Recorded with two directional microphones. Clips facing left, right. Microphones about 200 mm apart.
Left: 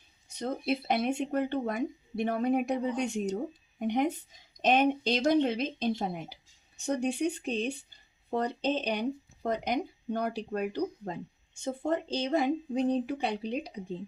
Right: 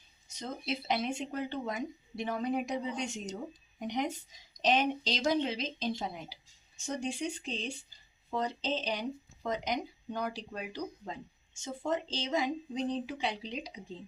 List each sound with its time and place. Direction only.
0.3 s a woman's voice: 60° left (ahead or behind)